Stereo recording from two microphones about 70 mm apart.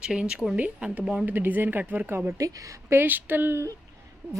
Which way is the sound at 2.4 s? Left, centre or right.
Right.